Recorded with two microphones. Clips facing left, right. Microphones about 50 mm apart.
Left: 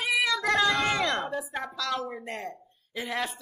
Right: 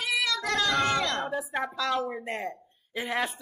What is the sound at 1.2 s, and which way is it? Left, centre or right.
Speech, centre.